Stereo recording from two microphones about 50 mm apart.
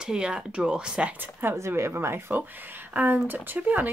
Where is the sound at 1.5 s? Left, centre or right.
Right.